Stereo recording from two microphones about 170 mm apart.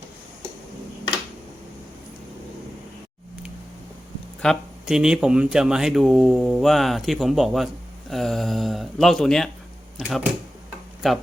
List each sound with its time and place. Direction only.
4.4 s speech: 5° right (ahead or behind)